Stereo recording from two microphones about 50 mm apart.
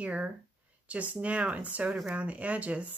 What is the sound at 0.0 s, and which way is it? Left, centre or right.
Speech, right.